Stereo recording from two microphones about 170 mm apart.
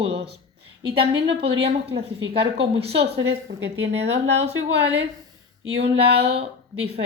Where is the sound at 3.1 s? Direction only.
90° right.